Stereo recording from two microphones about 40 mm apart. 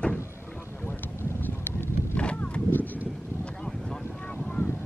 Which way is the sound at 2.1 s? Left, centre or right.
Left.